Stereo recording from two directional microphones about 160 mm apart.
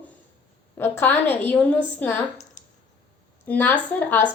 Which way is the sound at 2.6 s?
50° left (ahead or behind).